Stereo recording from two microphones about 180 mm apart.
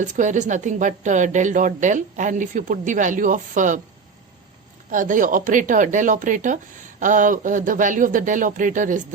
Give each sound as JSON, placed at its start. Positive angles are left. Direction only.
{"t": 0.0, "sound": "a woman's voice", "side_deg": -45}
{"t": 4.9, "sound": "a woman's voice", "side_deg": -45}